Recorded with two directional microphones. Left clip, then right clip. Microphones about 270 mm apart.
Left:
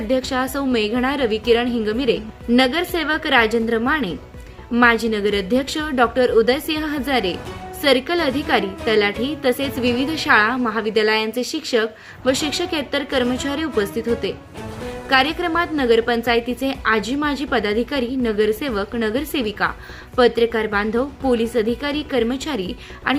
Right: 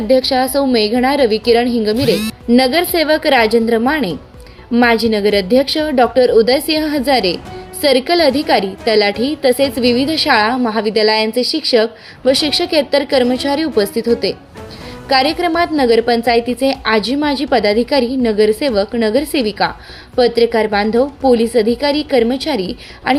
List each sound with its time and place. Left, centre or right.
0.1 s a woman's voice: centre